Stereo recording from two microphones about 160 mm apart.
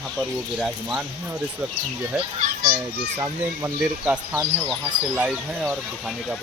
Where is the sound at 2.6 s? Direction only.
65° right (ahead or behind).